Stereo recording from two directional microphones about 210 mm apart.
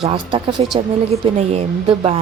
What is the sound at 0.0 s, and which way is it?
Speech, 25° right (ahead or behind).